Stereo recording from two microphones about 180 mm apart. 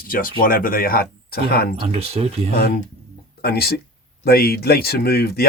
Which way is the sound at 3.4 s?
60° left (ahead or behind).